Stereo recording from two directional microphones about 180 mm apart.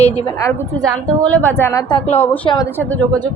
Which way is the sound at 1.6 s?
10° left (ahead or behind).